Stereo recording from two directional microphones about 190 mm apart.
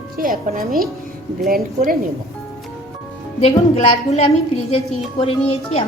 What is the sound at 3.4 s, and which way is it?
A woman's voice, 35° left (ahead or behind).